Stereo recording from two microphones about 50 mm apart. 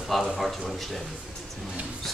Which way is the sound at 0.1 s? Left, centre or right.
Centre.